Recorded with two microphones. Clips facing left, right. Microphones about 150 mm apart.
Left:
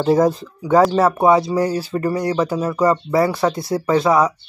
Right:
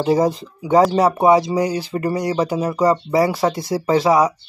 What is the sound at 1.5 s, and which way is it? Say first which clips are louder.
Speech: left 1 dB; 15° right (ahead or behind).